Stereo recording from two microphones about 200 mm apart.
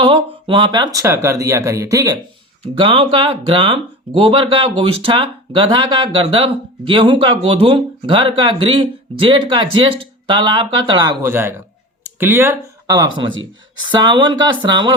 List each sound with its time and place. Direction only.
0.0 s speech: 25° right (ahead or behind)
2.7 s speech: 25° right (ahead or behind)